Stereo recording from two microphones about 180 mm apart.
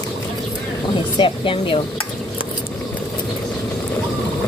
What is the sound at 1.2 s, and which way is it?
Speech, 30° left (ahead or behind).